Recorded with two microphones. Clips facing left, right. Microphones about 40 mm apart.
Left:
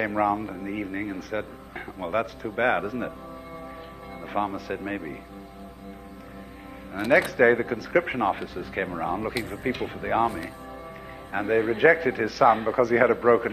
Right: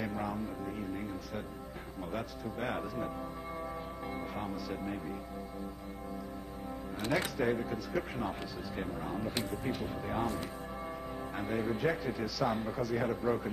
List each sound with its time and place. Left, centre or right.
0.0 s a man's voice: left
4.3 s a man's voice: left
7.1 s a man's voice: left
11.3 s a man's voice: left